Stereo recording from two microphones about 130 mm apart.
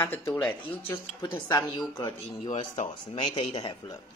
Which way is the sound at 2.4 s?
75° left (ahead or behind).